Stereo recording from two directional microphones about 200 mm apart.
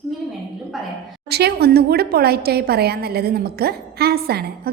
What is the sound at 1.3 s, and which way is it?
A woman's voice, 55° right (ahead or behind).